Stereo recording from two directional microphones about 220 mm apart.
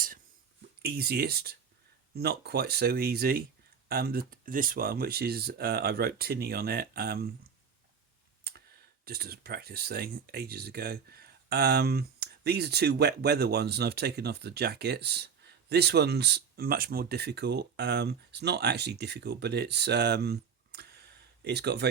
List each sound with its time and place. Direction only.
0.8 s speech: 45° right (ahead or behind)
9.0 s speech: 45° right (ahead or behind)